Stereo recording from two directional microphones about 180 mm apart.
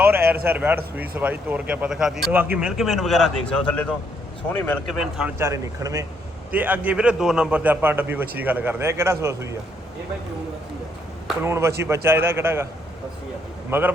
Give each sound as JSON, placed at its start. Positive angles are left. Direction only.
{"t": 0.0, "sound": "a sound", "side_deg": -15}
{"t": 0.4, "sound": "speech", "side_deg": -10}
{"t": 4.9, "sound": "speech", "side_deg": 0}
{"t": 5.4, "sound": "a man's voice", "side_deg": -15}
{"t": 11.4, "sound": "a man's voice", "side_deg": -15}
{"t": 13.7, "sound": "a man's voice", "side_deg": -10}